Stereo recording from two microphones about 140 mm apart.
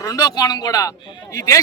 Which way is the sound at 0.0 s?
25° left (ahead or behind).